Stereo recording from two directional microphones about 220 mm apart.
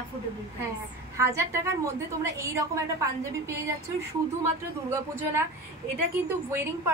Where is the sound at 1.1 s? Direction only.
15° right (ahead or behind).